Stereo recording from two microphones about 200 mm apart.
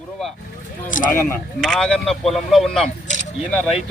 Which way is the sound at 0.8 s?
40° left (ahead or behind).